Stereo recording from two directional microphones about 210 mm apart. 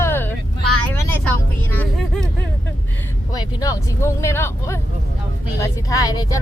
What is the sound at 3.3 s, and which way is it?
Speech, 15° left (ahead or behind).